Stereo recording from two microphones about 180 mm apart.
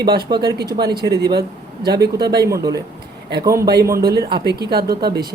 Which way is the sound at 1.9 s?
65° right (ahead or behind).